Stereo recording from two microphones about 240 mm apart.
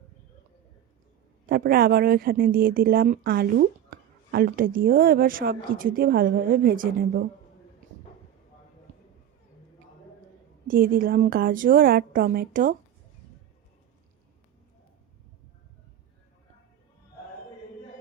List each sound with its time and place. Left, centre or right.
1.5 s speech: right
10.7 s speech: right